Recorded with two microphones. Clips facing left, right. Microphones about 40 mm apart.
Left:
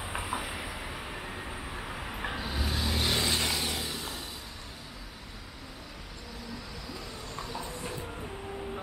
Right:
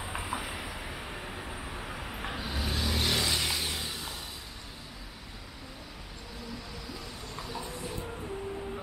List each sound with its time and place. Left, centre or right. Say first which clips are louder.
0.0 s vehicle: left 1 dB; centre
7.3 s train: left 1 dB; centre
7.9 s vehicle: even; centre